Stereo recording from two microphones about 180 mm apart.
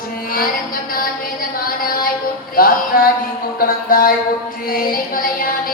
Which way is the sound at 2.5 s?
55° left (ahead or behind).